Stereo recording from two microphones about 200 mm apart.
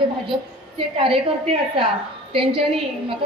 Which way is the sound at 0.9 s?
25° right (ahead or behind).